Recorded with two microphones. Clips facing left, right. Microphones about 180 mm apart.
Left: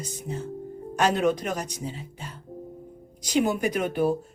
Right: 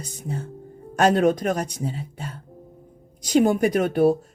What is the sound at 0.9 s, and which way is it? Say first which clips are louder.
Speech: right 5 dB; 45° right (ahead or behind).